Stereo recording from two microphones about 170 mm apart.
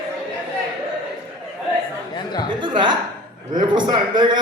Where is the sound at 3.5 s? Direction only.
25° right (ahead or behind).